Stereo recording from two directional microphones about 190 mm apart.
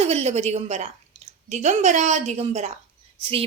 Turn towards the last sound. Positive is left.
turn(degrees=-30)  # may be behind; listen again after turning